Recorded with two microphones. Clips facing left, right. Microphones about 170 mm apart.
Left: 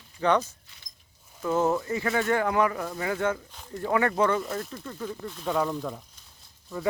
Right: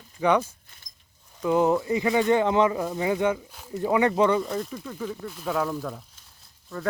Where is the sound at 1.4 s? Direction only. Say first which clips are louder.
Right 3 dB; 15° right (ahead or behind).